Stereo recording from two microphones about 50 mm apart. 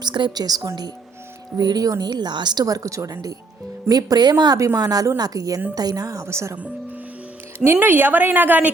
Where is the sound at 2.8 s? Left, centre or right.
Right.